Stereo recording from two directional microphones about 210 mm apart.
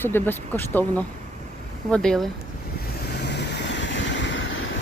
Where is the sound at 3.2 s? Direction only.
55° left (ahead or behind).